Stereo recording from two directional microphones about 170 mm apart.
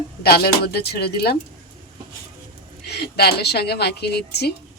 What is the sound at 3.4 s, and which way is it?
A woman's voice, 70° left (ahead or behind).